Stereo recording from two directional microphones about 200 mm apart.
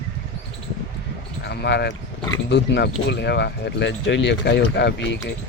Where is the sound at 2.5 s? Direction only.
60° left (ahead or behind).